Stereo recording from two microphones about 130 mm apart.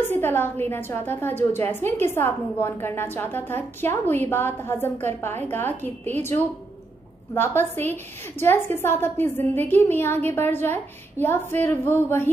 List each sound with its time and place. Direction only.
0.1 s a woman's voice: 15° left (ahead or behind)